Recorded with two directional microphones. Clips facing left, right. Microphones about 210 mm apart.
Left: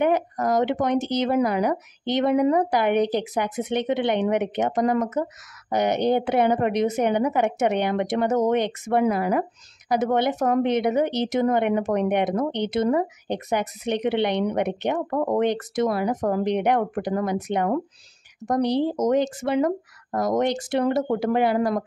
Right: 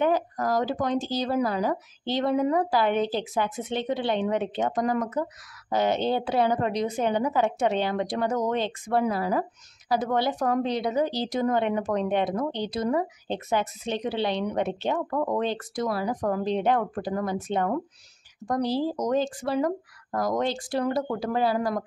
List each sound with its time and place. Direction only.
0.0 s a woman's voice: 20° left (ahead or behind)